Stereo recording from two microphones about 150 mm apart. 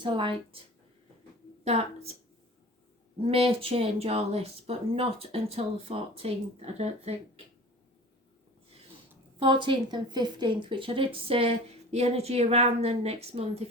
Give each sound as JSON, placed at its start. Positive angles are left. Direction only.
{"t": 0.0, "sound": "a woman's voice", "side_deg": -30}
{"t": 1.6, "sound": "a woman's voice", "side_deg": -45}
{"t": 3.2, "sound": "a woman's voice", "side_deg": -40}
{"t": 9.6, "sound": "a woman's voice", "side_deg": -30}